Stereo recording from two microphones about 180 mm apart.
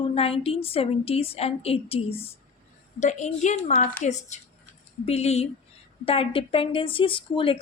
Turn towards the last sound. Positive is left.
turn(degrees=30)  # may be behind; listen again after turning